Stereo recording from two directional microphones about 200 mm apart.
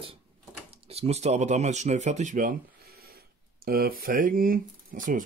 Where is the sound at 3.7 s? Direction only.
50° right (ahead or behind).